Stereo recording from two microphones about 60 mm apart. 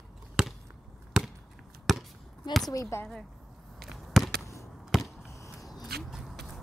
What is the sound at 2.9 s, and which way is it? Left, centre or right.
Speech, left.